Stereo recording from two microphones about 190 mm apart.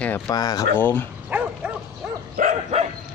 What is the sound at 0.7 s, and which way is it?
Speech, 10° left (ahead or behind).